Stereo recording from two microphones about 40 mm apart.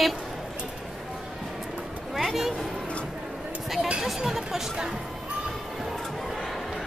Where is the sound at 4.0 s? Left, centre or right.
Centre.